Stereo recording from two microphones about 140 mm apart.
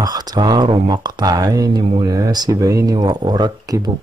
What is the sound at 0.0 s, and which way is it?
Speech, 25° right (ahead or behind).